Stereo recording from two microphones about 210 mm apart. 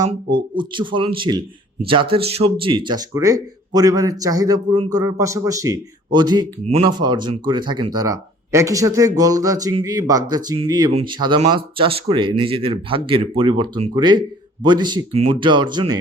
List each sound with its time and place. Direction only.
0.1 s speech: 20° right (ahead or behind)